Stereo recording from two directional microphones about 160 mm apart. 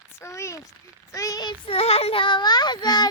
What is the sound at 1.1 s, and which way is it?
Child singing, 20° left (ahead or behind).